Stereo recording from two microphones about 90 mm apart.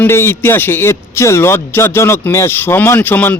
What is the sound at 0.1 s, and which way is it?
Speech, 30° left (ahead or behind).